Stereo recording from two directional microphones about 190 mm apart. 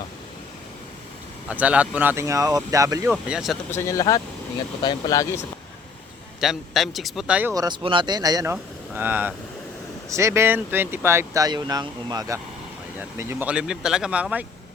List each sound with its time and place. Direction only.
1.5 s speech: 5° right (ahead or behind)
3.1 s a man's voice: 5° right (ahead or behind)
3.7 s speech: 15° left (ahead or behind)
6.4 s a man's voice: centre (ahead or behind)
7.5 s speech: 20° right (ahead or behind)
13.0 s speech: 10° right (ahead or behind)